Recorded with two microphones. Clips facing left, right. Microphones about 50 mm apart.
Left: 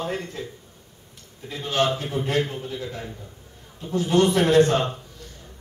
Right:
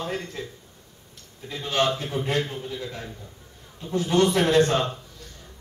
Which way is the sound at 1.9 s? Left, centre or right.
Left.